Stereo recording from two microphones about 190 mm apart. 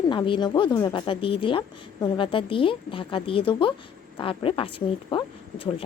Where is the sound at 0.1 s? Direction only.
25° left (ahead or behind).